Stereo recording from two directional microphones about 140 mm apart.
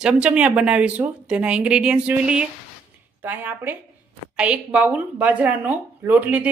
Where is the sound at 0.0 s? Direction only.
10° right (ahead or behind).